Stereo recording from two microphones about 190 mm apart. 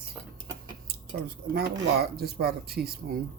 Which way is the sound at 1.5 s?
55° right (ahead or behind).